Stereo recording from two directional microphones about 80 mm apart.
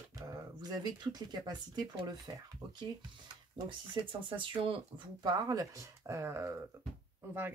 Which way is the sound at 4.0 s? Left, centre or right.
Right.